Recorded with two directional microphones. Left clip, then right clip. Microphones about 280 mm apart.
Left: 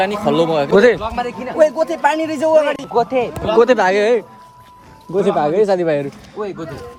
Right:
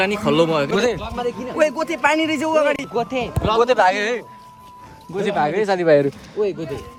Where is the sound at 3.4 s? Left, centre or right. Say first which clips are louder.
Left 2 dB; centre.